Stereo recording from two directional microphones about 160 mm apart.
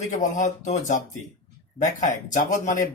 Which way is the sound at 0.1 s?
50° left (ahead or behind).